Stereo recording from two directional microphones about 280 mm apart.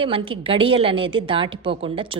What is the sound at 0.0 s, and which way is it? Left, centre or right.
A woman's voice, centre.